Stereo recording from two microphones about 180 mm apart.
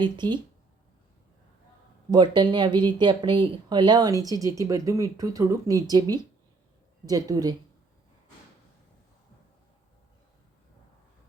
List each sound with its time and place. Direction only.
0.0 s speech: 25° right (ahead or behind)
2.0 s speech: 25° right (ahead or behind)